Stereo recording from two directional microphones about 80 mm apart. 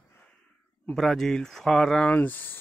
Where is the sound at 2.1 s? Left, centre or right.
Left.